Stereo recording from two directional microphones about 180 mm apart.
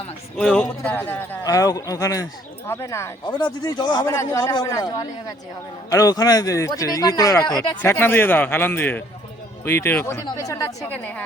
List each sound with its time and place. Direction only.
0.3 s a man's voice: 5° left (ahead or behind); by 7.8 s 25° left (ahead or behind)
7.8 s a man's voice: 15° left (ahead or behind)